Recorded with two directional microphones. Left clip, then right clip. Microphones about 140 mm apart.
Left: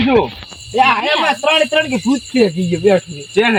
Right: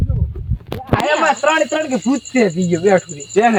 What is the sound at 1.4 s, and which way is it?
Speech, 15° right (ahead or behind).